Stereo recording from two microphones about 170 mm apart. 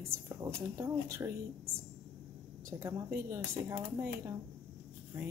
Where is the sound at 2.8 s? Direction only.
15° right (ahead or behind).